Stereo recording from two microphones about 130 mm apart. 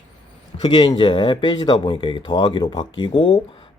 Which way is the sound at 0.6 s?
35° left (ahead or behind).